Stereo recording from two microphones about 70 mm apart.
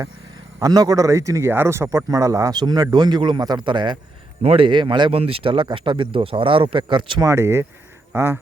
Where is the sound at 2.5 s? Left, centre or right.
Right.